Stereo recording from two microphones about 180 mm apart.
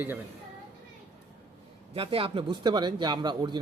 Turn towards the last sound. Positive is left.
turn(degrees=-25)  # may be behind; listen again after turning